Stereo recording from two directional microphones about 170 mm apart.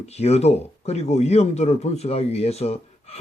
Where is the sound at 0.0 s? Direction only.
40° left (ahead or behind).